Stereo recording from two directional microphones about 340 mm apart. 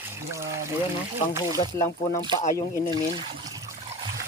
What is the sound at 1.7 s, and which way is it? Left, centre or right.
Speech, centre.